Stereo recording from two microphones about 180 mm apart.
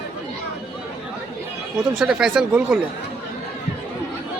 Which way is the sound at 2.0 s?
5° right (ahead or behind).